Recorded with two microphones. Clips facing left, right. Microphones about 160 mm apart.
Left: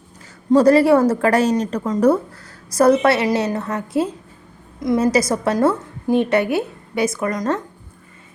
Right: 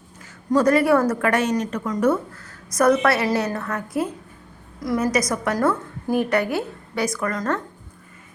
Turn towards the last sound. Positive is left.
turn(degrees=20)  # may be behind; listen again after turning